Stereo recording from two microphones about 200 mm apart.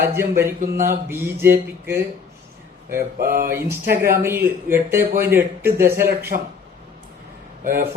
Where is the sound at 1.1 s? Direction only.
10° right (ahead or behind).